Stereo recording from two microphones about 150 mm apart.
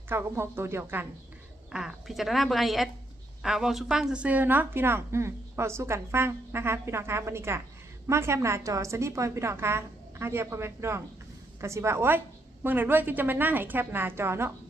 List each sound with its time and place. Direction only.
0.1 s a woman's voice: 15° right (ahead or behind)
1.7 s a woman's voice: 5° right (ahead or behind)